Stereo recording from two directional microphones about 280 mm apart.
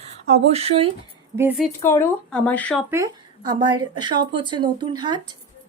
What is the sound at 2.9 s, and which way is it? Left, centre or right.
Speech, centre.